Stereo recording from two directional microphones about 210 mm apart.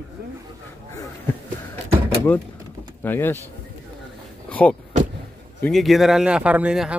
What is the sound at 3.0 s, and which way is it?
Speech, 10° left (ahead or behind).